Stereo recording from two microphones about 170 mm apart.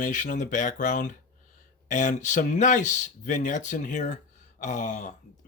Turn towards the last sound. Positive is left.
turn(degrees=45)  # may be behind; listen again after turning